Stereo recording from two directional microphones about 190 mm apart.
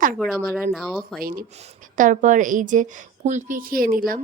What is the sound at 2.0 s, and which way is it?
Speech, 40° right (ahead or behind).